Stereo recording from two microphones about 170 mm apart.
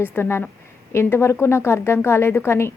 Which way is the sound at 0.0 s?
15° left (ahead or behind).